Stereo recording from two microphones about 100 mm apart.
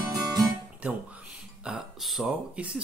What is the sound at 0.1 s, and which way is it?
Guitar, 40° right (ahead or behind).